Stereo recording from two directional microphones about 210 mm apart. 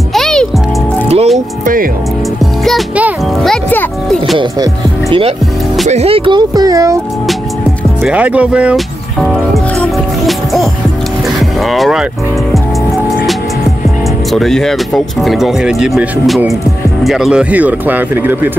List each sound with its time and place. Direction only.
0.1 s music: centre (ahead or behind)
1.0 s music: 30° right (ahead or behind)
2.6 s music: centre (ahead or behind)
5.9 s speech: 30° right (ahead or behind)
8.0 s music: 5° right (ahead or behind)
14.3 s speech: centre (ahead or behind)